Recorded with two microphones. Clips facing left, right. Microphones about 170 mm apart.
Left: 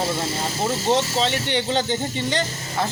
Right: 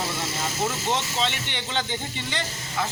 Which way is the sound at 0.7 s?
35° left (ahead or behind).